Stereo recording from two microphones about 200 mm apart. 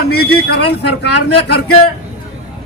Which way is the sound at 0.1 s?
50° left (ahead or behind).